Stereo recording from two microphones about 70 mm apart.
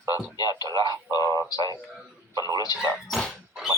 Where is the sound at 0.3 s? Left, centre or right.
Left.